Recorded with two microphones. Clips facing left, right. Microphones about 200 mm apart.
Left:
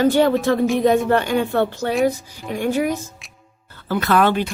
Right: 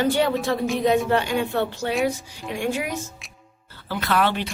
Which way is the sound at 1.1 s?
50° left (ahead or behind).